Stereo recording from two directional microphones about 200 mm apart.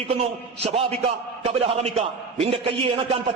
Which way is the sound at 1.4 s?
30° right (ahead or behind).